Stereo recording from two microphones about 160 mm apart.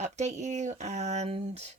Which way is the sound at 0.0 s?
45° right (ahead or behind).